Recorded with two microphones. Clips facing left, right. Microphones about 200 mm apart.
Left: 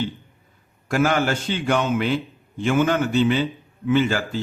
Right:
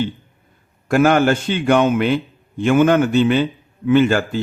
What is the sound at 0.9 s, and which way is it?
Speech, 55° right (ahead or behind).